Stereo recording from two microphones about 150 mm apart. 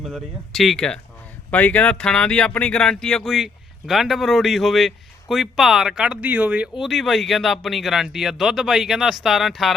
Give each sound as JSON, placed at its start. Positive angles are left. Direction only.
{"t": 0.0, "sound": "speech", "side_deg": 0}